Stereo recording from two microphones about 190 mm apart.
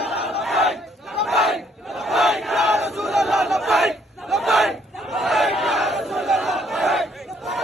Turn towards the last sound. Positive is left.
turn(degrees=0)  # may be behind; listen again after turning